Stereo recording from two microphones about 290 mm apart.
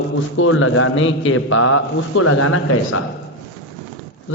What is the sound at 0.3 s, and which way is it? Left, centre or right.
A man's voice, left.